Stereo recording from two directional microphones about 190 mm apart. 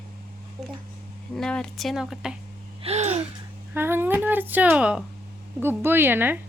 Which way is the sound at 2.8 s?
35° right (ahead or behind).